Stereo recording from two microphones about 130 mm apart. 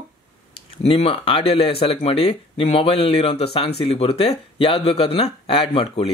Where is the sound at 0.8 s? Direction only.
45° left (ahead or behind).